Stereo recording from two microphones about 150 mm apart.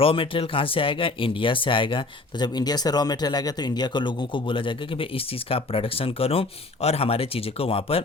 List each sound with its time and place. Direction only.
0.0 s speech: 40° left (ahead or behind)